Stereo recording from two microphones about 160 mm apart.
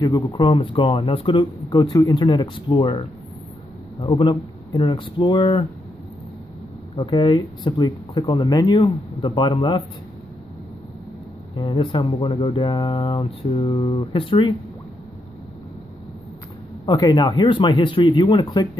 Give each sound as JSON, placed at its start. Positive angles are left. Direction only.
{"t": 0.0, "sound": "speech", "side_deg": 20}
{"t": 0.5, "sound": "speech", "side_deg": 30}
{"t": 7.0, "sound": "speech", "side_deg": 30}
{"t": 11.5, "sound": "speech", "side_deg": 30}
{"t": 16.8, "sound": "speech", "side_deg": 25}